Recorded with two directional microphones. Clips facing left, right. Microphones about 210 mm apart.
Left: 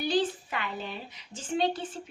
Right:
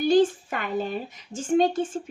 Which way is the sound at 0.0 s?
50° right (ahead or behind).